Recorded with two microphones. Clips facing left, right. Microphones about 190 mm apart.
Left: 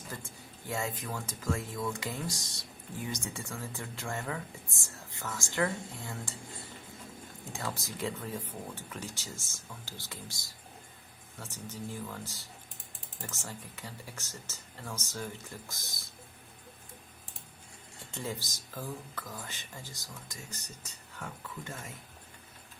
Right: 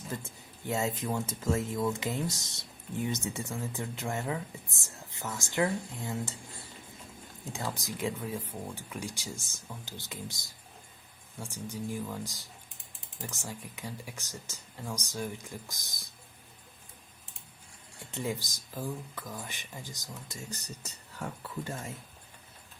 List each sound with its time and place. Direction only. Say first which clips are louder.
0.1 s speech: right 6 dB; 20° right (ahead or behind)
6.4 s speech: left 2 dB; 25° left (ahead or behind)
7.4 s speech: right 2 dB; 20° right (ahead or behind)
18.1 s speech: right 4 dB; 15° right (ahead or behind)
21.2 s speech: right 5 dB; 30° right (ahead or behind)